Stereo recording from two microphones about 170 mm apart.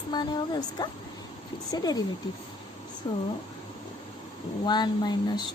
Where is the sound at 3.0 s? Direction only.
25° left (ahead or behind).